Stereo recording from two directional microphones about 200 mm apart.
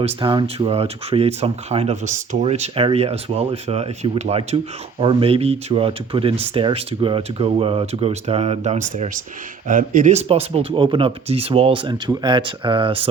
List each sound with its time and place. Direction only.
0.0 s speech: 25° right (ahead or behind)